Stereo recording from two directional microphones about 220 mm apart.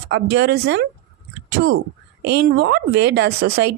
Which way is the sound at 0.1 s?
50° right (ahead or behind).